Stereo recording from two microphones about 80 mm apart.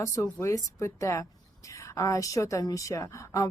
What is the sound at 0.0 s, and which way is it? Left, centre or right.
Speech, left.